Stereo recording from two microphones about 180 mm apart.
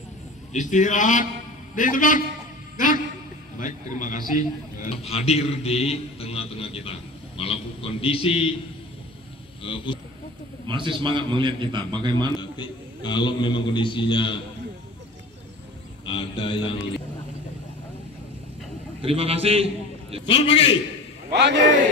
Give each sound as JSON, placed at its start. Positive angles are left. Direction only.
{"t": 0.5, "sound": "a man's voice", "side_deg": 45}
{"t": 3.5, "sound": "a man's voice", "side_deg": 45}
{"t": 9.6, "sound": "speech", "side_deg": 30}
{"t": 10.7, "sound": "a man's voice", "side_deg": -25}
{"t": 12.4, "sound": "a man's voice", "side_deg": 25}
{"t": 16.1, "sound": "a man's voice", "side_deg": 30}
{"t": 18.9, "sound": "a man's voice", "side_deg": -30}
{"t": 20.2, "sound": "a man's voice", "side_deg": 30}
{"t": 21.3, "sound": "a man's voice", "side_deg": -70}